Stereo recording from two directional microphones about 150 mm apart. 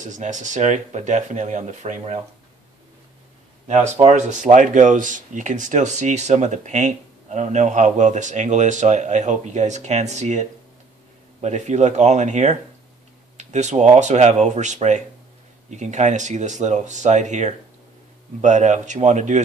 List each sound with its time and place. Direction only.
0.0 s speech: 55° right (ahead or behind)
3.6 s speech: 50° right (ahead or behind)
11.4 s speech: 50° right (ahead or behind)